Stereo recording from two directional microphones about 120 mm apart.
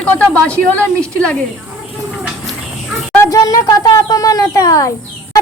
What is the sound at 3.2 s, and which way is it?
Speech, 30° left (ahead or behind).